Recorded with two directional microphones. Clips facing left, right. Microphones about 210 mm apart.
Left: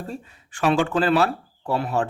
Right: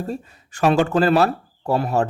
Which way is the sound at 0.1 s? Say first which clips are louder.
Right 5 dB; 40° right (ahead or behind).